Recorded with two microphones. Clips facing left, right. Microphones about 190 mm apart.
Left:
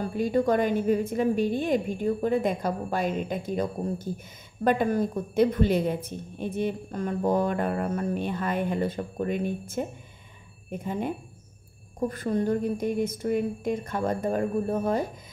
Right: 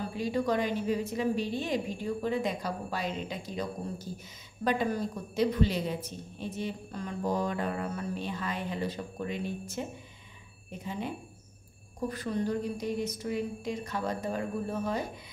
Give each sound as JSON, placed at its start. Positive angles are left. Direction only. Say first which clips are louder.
{"t": 0.1, "sound": "a woman's voice", "louder": "left 6 dB", "side_deg": 50}